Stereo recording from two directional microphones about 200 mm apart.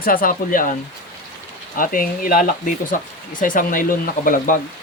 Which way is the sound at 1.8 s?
45° left (ahead or behind).